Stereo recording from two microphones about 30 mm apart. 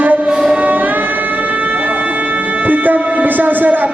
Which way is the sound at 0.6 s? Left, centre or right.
Right.